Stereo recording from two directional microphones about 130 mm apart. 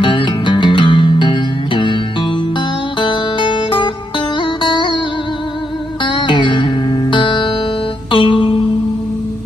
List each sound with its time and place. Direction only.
0.0 s music: 40° left (ahead or behind)
6.0 s music: 40° left (ahead or behind)